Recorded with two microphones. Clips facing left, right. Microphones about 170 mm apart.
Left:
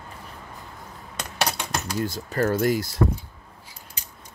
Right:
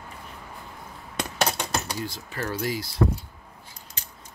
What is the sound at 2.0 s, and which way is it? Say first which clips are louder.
Speech: left 8 dB; 45° left (ahead or behind).